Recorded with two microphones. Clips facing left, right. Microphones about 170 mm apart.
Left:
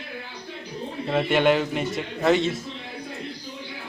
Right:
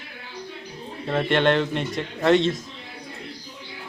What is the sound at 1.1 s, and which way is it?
A man's voice, 5° left (ahead or behind).